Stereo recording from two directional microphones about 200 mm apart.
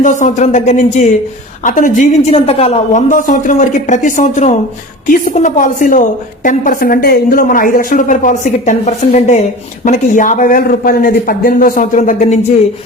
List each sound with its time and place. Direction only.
0.0 s a woman's voice: 35° left (ahead or behind)